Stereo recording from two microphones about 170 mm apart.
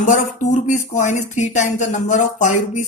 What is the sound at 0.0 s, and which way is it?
A woman's voice, 45° left (ahead or behind).